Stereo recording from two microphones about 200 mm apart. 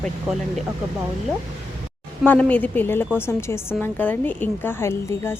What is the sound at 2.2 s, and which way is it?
A woman's voice, 5° left (ahead or behind).